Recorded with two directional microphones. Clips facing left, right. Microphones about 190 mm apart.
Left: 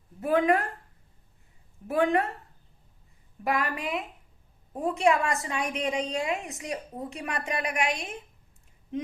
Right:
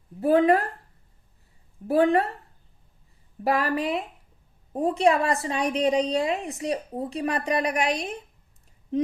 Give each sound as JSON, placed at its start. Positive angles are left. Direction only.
{"t": 0.2, "sound": "a woman's voice", "side_deg": -30}
{"t": 1.9, "sound": "a woman's voice", "side_deg": -35}
{"t": 3.4, "sound": "a woman's voice", "side_deg": -35}